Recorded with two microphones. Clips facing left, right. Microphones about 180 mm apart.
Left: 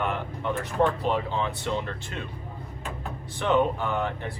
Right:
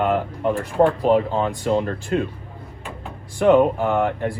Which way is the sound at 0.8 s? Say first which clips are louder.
Right 8 dB; 35° right (ahead or behind).